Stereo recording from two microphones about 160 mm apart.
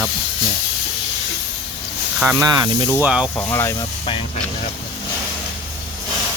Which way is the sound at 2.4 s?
25° right (ahead or behind).